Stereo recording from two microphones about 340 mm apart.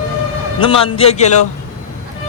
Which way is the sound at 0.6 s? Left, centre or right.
Centre.